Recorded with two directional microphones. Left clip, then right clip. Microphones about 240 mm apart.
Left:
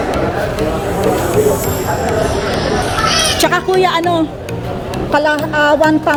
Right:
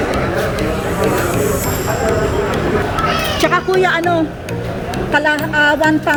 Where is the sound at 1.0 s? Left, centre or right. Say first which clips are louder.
Left 3 dB; centre.